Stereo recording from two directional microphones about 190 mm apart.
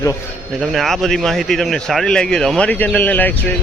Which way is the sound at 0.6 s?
Centre (ahead or behind).